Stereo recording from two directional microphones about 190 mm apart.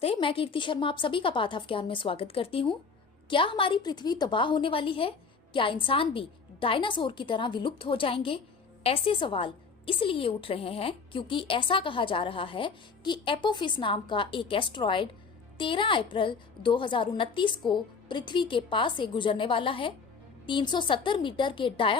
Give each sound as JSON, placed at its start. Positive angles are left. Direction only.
{"t": 0.0, "sound": "a woman's voice", "side_deg": 30}